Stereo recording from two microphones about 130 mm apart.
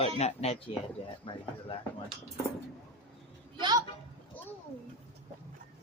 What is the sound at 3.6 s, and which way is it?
Speech, 30° right (ahead or behind).